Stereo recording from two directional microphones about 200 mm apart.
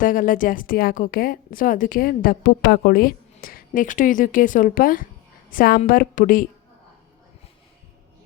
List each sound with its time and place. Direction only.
0.0 s a woman's voice: 40° left (ahead or behind)